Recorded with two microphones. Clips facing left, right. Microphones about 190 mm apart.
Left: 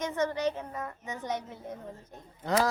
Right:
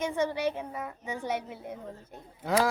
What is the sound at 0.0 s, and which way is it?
A child's voice, 10° right (ahead or behind).